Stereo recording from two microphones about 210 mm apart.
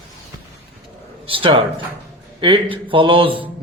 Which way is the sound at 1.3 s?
25° right (ahead or behind).